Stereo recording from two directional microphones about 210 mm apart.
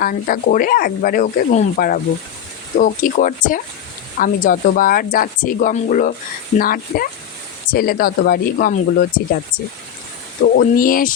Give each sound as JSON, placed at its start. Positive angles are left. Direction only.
{"t": 0.0, "sound": "speech", "side_deg": 40}
{"t": 10.4, "sound": "speech", "side_deg": 50}